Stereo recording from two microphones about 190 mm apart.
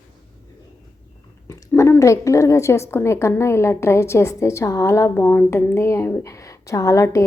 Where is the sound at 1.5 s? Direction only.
15° left (ahead or behind).